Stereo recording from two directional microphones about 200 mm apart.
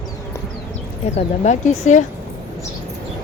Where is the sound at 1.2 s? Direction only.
35° left (ahead or behind).